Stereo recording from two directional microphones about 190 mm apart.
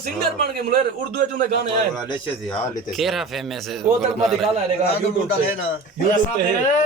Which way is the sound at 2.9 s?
Centre (ahead or behind).